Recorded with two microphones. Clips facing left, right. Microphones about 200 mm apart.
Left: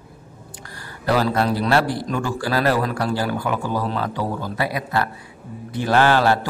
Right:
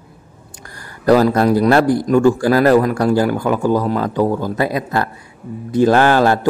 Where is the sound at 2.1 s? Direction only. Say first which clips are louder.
Right 12 dB; 45° right (ahead or behind).